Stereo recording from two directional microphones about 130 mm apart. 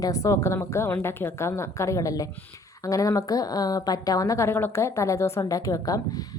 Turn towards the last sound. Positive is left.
turn(degrees=30)  # may be behind; listen again after turning